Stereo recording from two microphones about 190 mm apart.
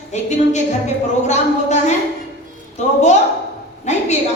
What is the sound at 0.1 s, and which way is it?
Speech, 35° left (ahead or behind).